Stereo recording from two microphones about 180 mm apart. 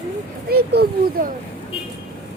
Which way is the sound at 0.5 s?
60° right (ahead or behind).